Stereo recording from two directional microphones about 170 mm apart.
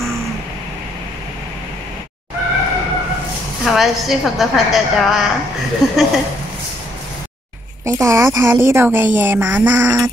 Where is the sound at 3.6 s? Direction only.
Centre (ahead or behind).